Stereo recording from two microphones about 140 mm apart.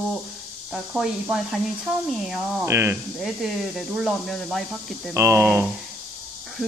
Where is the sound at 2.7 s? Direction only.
20° right (ahead or behind).